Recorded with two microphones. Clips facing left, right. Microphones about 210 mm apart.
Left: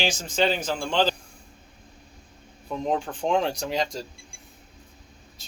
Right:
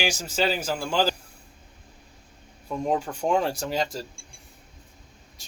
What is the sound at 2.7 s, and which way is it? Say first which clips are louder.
Speech: right 1 dB; 5° right (ahead or behind).